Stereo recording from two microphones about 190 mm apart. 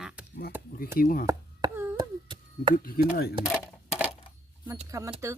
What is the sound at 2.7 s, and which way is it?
Speech, 50° left (ahead or behind).